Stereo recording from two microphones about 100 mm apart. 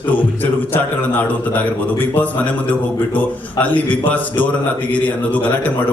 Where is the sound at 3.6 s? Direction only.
15° left (ahead or behind).